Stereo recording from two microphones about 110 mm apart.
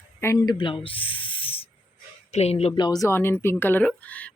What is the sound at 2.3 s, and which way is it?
Speech, 70° left (ahead or behind).